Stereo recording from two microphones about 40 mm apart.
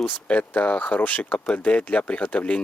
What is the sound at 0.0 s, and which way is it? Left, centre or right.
Speech, left.